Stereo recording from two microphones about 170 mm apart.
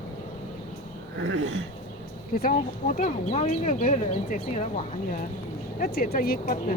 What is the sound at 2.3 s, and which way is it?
Speech, 55° left (ahead or behind).